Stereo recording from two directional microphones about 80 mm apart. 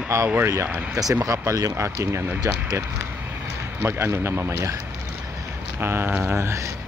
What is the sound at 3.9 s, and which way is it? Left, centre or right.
Speech, right.